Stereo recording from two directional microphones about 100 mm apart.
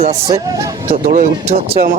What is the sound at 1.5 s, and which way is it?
Speech, 70° right (ahead or behind).